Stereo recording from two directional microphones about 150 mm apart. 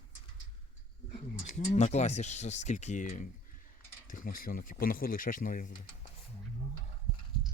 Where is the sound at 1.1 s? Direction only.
45° left (ahead or behind); by 5.8 s 70° left (ahead or behind).